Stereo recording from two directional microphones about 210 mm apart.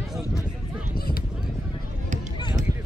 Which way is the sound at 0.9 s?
45° left (ahead or behind).